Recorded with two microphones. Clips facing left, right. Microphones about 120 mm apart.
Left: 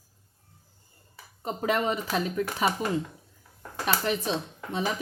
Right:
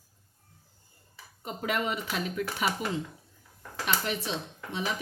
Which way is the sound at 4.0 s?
40° left (ahead or behind).